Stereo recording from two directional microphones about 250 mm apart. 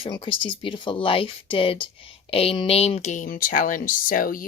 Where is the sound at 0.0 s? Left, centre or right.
Left.